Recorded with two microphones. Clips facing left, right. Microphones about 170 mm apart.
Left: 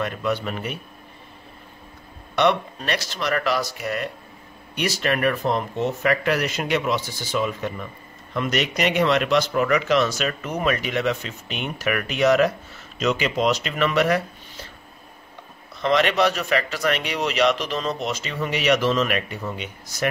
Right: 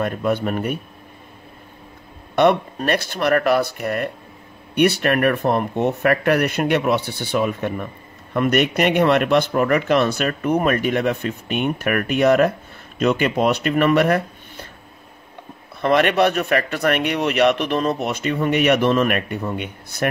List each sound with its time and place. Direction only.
0.0 s speech: 50° right (ahead or behind)
2.3 s speech: 50° right (ahead or behind)
15.8 s speech: 55° right (ahead or behind)